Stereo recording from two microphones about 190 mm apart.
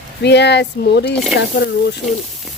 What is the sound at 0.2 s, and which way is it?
Speech, 65° left (ahead or behind).